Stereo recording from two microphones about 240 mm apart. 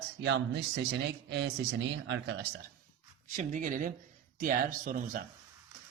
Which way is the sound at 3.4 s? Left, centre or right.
Right.